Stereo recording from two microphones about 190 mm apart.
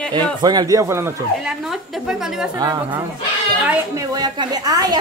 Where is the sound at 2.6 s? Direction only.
20° right (ahead or behind).